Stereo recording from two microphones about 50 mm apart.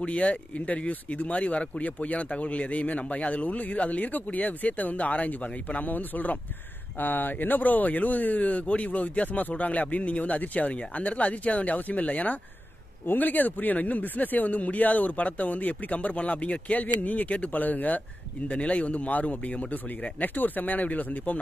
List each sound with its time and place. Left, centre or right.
0.0 s speech: left
13.0 s speech: left